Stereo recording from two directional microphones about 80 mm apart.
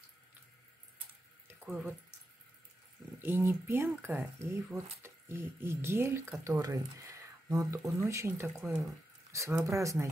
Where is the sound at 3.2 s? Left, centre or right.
Right.